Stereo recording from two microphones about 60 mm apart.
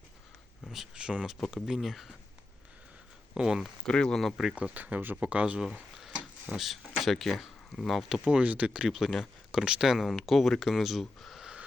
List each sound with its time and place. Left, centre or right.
0.9 s speech: centre
1.6 s speech: centre
3.3 s speech: centre
3.8 s speech: centre
4.5 s speech: right
6.5 s speech: centre
8.9 s speech: centre
9.5 s speech: centre
11.2 s a sound: centre